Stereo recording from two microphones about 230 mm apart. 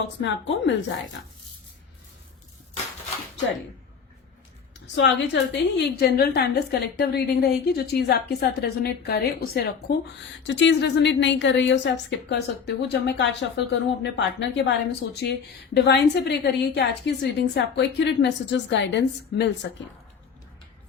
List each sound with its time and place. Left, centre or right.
0.2 s speech: left
4.9 s speech: left